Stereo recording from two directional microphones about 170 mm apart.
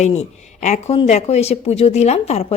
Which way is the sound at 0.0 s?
40° left (ahead or behind).